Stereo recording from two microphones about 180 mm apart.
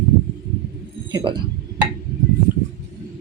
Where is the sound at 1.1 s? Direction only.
25° right (ahead or behind).